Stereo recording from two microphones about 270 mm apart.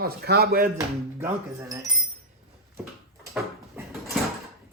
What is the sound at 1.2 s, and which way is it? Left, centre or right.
Speech, centre.